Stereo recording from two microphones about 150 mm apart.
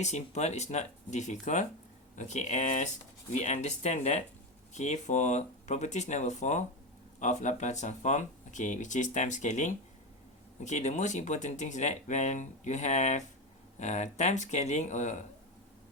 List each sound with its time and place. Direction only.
0.0 s speech: 50° left (ahead or behind)